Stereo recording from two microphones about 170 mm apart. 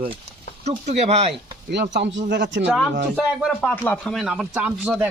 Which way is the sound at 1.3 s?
85° right.